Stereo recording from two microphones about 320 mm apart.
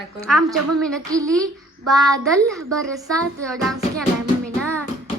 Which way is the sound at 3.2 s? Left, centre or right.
Centre.